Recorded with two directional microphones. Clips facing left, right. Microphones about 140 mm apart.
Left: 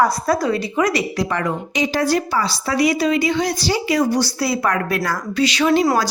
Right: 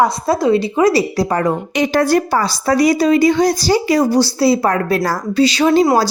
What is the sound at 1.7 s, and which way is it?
Speech, 60° right (ahead or behind).